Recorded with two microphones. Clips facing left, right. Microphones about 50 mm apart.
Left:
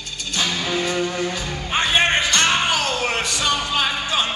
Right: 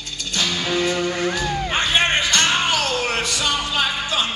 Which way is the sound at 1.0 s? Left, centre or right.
Right.